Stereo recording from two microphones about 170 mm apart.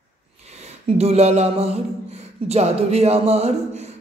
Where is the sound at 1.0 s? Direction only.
40° right (ahead or behind).